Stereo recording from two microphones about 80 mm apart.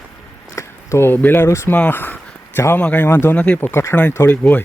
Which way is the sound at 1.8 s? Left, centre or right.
Left.